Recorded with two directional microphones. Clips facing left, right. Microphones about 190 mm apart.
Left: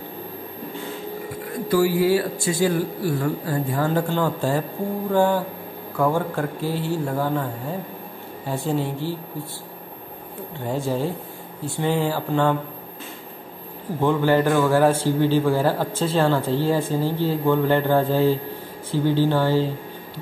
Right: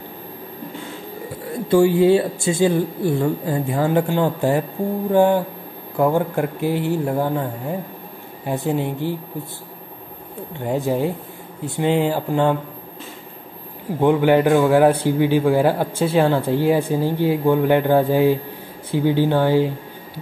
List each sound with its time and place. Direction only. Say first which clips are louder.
1.7 s a man's voice: right 5 dB; 25° right (ahead or behind)
8.5 s a man's voice: right 3 dB; 15° right (ahead or behind)
10.7 s a man's voice: right 4 dB; 15° right (ahead or behind)
14.0 s a man's voice: right 4 dB; 15° right (ahead or behind)